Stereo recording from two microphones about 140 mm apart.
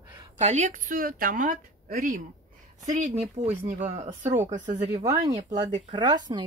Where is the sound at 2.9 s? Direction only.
60° right (ahead or behind).